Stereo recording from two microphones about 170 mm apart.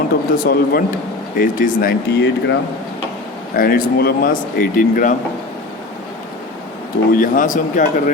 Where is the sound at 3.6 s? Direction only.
60° left (ahead or behind).